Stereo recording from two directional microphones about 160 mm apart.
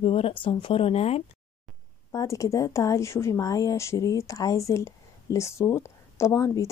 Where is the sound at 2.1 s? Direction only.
20° left (ahead or behind).